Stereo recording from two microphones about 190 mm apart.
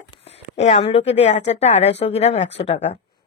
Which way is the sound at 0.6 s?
35° left (ahead or behind).